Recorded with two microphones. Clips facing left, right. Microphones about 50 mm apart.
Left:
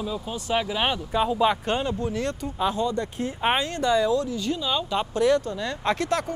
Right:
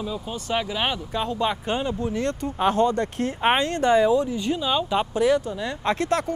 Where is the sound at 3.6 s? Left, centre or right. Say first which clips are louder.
Right 3 dB; right.